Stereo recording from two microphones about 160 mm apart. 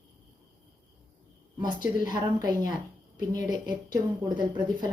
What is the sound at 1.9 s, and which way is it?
A woman's voice, 25° right (ahead or behind).